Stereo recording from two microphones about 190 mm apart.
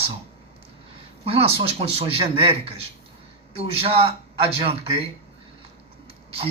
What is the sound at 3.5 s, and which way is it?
A man's voice, 30° right (ahead or behind).